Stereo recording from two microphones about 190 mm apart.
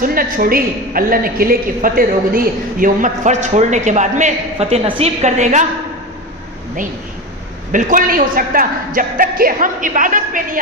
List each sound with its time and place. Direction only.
0.0 s a woman's voice: 50° right (ahead or behind)
7.7 s a woman's voice: 45° right (ahead or behind)